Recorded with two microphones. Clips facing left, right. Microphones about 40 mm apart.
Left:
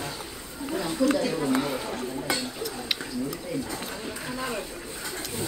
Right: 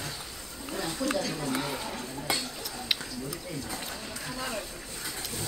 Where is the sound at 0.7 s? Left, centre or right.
Centre.